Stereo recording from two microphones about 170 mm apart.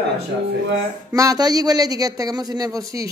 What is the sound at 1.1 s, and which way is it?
Speech, 20° right (ahead or behind).